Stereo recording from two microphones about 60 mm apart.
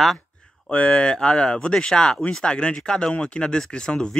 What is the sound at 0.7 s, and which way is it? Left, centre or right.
Speech, centre.